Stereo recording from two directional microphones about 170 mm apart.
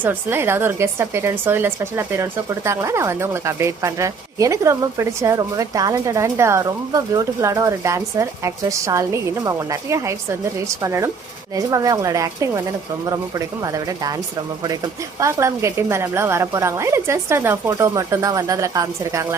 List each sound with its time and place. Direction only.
0.0 s speech: 10° right (ahead or behind)
15.2 s speech: 15° right (ahead or behind)